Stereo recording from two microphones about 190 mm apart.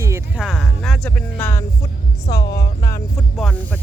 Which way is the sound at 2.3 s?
60° left (ahead or behind).